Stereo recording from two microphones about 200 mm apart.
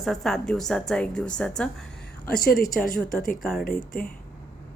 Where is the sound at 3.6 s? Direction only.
50° left (ahead or behind).